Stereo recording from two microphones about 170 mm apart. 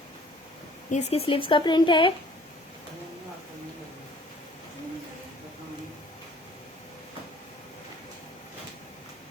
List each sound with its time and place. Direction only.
0.9 s speech: 40° left (ahead or behind)